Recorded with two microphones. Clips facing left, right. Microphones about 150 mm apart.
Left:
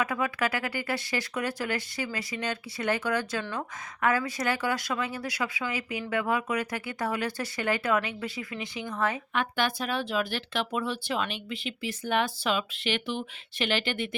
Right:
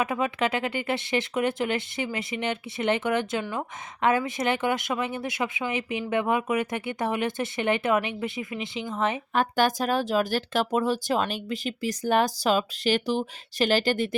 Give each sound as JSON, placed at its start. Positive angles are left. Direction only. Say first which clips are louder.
{"t": 0.0, "sound": "speech", "louder": "right 3 dB", "side_deg": -25}
{"t": 9.3, "sound": "speech", "louder": "right 5 dB", "side_deg": -40}